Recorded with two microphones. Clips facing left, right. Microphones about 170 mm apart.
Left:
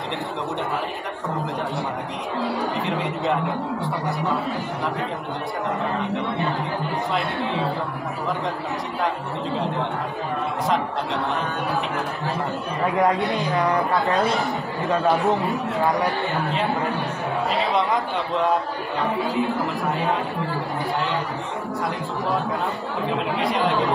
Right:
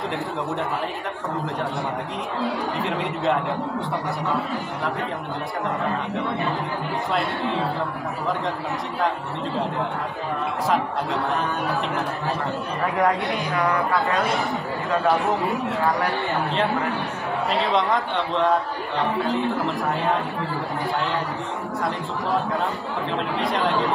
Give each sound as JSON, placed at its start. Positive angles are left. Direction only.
{"t": 2.8, "sound": "a man's voice", "side_deg": 0}
{"t": 12.9, "sound": "speech", "side_deg": 20}
{"t": 17.5, "sound": "a man's voice", "side_deg": 0}